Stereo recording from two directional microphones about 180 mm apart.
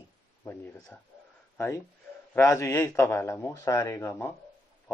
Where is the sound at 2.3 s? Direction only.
15° left (ahead or behind).